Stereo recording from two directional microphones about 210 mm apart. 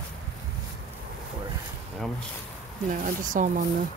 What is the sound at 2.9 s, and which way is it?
Speech, 35° right (ahead or behind).